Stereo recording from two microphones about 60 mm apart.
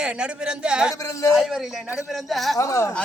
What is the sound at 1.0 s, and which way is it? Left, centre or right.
Speech, left.